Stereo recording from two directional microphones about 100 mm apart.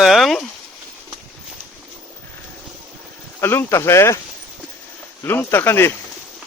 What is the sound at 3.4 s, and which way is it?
Speech, 25° left (ahead or behind).